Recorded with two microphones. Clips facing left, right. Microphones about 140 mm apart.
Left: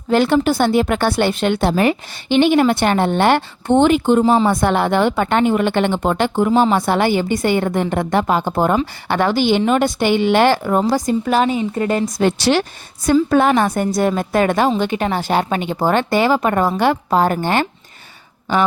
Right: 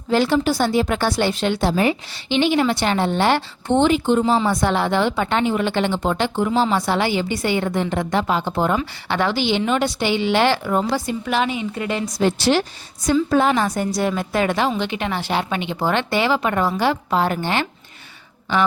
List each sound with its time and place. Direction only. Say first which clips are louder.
0.1 s a woman's voice: left 3 dB; 55° left (ahead or behind)
12.4 s a woman's voice: left 2 dB; 75° left (ahead or behind); by 17.7 s 45° left (ahead or behind)